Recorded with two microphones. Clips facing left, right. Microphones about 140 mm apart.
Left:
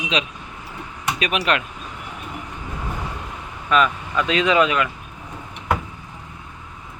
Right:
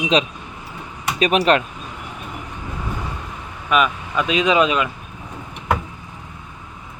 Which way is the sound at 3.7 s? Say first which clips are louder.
Even; 15° right (ahead or behind).